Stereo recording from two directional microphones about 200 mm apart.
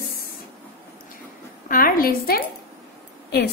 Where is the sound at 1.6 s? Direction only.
45° left (ahead or behind).